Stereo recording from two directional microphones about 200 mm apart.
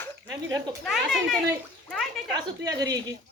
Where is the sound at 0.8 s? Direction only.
Centre (ahead or behind).